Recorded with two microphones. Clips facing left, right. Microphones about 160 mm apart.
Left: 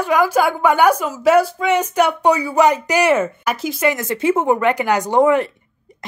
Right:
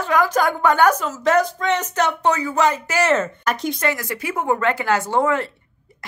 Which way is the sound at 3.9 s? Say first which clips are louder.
Left 8 dB; 25° left (ahead or behind).